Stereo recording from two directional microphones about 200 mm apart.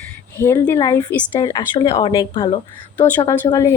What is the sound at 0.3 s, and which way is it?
A woman's voice, 15° left (ahead or behind).